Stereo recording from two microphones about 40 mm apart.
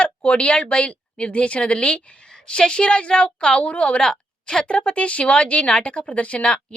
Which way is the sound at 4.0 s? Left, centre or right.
Centre.